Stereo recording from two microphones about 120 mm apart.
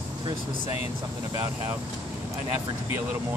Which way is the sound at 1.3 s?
25° right (ahead or behind).